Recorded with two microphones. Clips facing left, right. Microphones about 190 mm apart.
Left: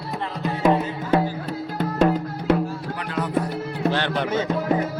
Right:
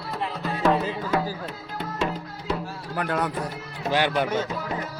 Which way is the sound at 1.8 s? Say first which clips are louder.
Left 9 dB; 50° left (ahead or behind).